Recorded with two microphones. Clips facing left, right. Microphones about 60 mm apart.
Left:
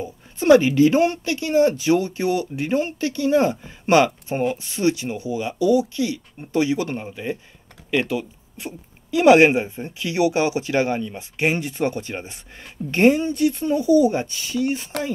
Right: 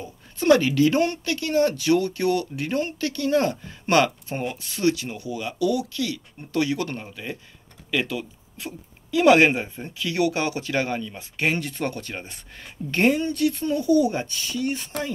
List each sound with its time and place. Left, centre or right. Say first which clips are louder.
0.0 s speech: left 2 dB; left